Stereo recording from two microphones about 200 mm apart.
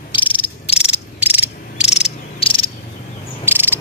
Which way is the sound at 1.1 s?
10° right (ahead or behind).